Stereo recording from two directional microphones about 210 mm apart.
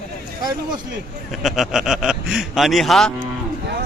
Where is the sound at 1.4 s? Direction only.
Centre (ahead or behind).